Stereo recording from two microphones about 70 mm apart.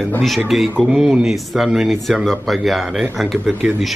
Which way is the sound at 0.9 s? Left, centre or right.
Centre.